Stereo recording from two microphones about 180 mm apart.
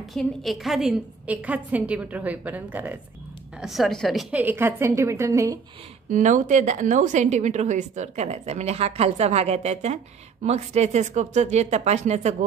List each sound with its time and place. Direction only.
0.0 s a woman's voice: centre (ahead or behind); by 5.6 s 15° right (ahead or behind)
6.0 s a woman's voice: 45° right (ahead or behind)